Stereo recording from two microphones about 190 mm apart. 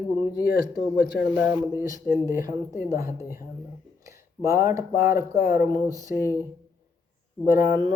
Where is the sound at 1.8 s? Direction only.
20° right (ahead or behind).